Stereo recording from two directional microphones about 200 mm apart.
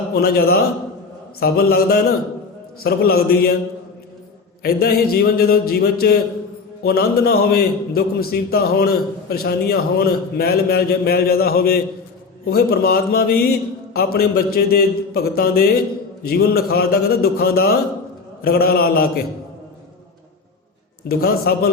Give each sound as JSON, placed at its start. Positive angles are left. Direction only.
{"t": 0.1, "sound": "a man's voice", "side_deg": 50}
{"t": 4.6, "sound": "a man's voice", "side_deg": 50}
{"t": 21.1, "sound": "a man's voice", "side_deg": 50}